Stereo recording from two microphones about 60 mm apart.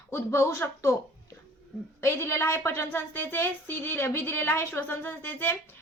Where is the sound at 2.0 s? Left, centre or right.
Left.